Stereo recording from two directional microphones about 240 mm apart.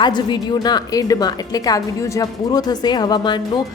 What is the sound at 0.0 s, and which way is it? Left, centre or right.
A woman's voice, centre.